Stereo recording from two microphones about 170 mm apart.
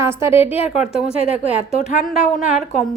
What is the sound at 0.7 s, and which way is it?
Speech, centre (ahead or behind).